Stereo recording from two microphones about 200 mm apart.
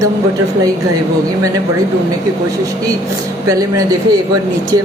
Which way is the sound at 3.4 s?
15° right (ahead or behind).